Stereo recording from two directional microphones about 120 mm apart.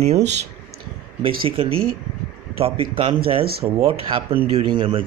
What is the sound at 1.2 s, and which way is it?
Speech, 50° right (ahead or behind).